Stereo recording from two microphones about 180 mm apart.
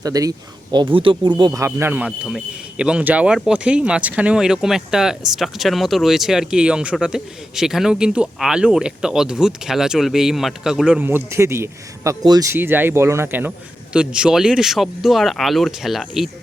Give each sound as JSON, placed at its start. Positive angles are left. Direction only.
{"t": 0.0, "sound": "a man's voice", "side_deg": -20}